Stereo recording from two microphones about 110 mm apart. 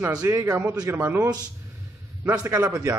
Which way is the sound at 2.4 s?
30° right (ahead or behind).